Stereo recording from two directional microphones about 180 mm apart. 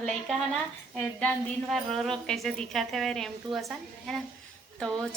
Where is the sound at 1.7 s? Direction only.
Centre (ahead or behind).